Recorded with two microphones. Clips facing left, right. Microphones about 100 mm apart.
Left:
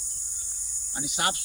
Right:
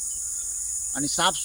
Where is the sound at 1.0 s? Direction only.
60° right (ahead or behind).